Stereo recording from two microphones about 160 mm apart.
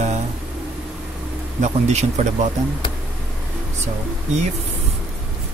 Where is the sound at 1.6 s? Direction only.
45° right (ahead or behind).